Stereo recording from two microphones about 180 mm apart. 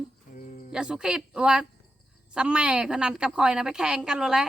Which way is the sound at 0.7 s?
5° right (ahead or behind).